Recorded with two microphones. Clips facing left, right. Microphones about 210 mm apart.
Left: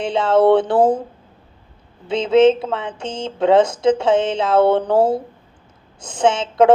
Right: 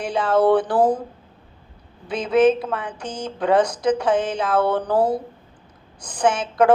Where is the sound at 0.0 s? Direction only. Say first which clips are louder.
Left 4 dB; 25° left (ahead or behind).